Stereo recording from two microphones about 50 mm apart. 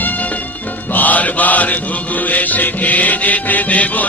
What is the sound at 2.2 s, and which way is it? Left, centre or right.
Music, left.